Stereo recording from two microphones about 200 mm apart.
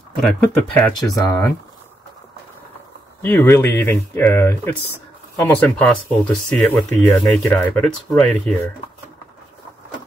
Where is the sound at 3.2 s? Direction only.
10° left (ahead or behind).